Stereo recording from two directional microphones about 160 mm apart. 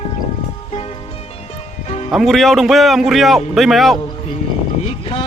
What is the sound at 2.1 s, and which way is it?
A man's voice, centre (ahead or behind).